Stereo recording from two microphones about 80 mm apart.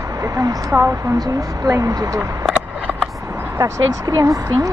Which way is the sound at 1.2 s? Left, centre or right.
Right.